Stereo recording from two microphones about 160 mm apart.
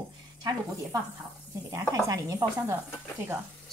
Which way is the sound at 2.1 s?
20° right (ahead or behind).